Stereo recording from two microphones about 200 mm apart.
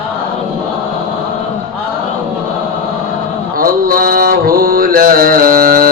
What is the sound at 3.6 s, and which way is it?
Mantra, 45° right (ahead or behind).